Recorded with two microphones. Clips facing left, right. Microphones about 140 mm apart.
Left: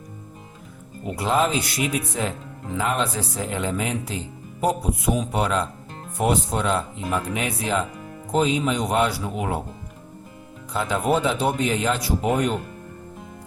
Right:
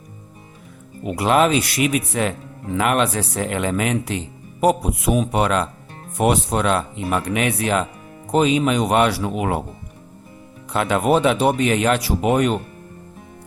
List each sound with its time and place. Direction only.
1.0 s speech: 75° right (ahead or behind)
10.7 s speech: 70° right (ahead or behind)